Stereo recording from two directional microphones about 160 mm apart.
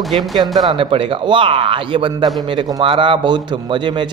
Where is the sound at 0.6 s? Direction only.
35° right (ahead or behind).